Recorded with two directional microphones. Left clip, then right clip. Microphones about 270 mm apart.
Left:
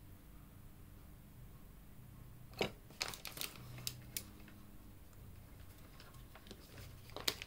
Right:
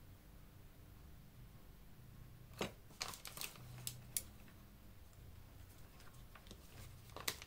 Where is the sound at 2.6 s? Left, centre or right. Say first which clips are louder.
Left 5 dB; centre.